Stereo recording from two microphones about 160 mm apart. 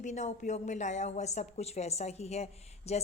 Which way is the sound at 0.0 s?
50° left (ahead or behind).